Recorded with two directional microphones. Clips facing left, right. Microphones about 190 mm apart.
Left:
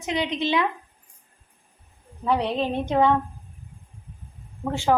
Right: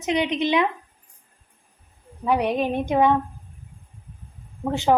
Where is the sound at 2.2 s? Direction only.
10° right (ahead or behind).